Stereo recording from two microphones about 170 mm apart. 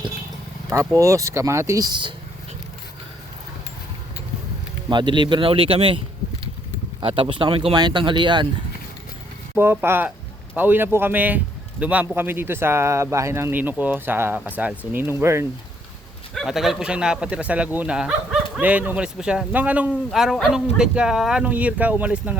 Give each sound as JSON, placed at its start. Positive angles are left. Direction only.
{"t": 0.7, "sound": "a man's voice", "side_deg": -15}
{"t": 4.9, "sound": "speech", "side_deg": -25}
{"t": 7.0, "sound": "speech", "side_deg": -30}
{"t": 9.6, "sound": "a man's voice", "side_deg": -15}
{"t": 16.3, "sound": "a man's voice", "side_deg": 0}